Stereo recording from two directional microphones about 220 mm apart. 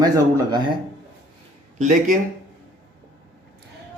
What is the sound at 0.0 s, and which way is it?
Speech, 15° right (ahead or behind).